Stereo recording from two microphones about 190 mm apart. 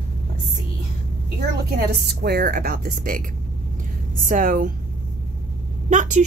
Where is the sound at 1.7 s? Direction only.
55° right (ahead or behind).